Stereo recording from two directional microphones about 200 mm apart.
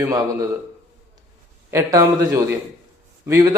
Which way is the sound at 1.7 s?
15° right (ahead or behind).